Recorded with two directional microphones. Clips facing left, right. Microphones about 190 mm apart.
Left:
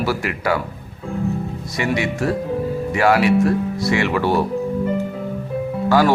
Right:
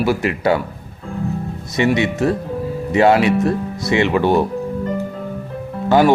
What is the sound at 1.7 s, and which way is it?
Speech, 25° right (ahead or behind).